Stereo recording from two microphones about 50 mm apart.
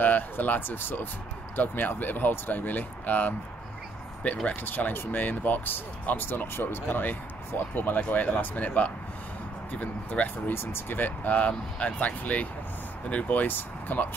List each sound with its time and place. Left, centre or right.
0.0 s speech: left
4.6 s speech: left
10.5 s speech: left